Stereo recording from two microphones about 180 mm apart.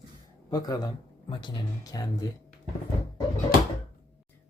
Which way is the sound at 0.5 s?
20° left (ahead or behind).